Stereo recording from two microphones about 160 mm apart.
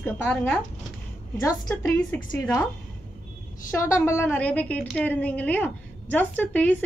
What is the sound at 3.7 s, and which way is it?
A woman's voice, 15° left (ahead or behind).